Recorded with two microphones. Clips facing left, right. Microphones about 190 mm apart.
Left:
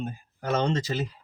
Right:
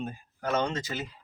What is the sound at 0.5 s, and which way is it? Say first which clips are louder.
Speech: left 4 dB; 35° left (ahead or behind).